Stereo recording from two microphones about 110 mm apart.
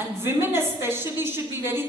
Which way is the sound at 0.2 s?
20° right (ahead or behind).